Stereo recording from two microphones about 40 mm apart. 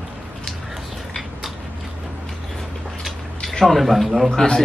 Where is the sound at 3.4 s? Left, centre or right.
Centre.